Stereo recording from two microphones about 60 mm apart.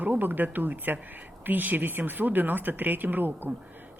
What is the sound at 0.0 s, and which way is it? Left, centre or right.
Speech, right.